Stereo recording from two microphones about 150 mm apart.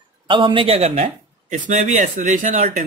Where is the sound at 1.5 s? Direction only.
55° right (ahead or behind).